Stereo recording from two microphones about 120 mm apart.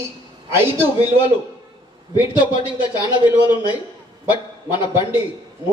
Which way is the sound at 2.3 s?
40° left (ahead or behind).